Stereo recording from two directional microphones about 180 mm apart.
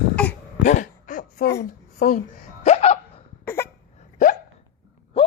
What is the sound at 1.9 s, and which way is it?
Speech, 50° left (ahead or behind).